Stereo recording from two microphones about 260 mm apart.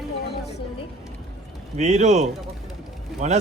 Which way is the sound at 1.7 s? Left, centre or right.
Right.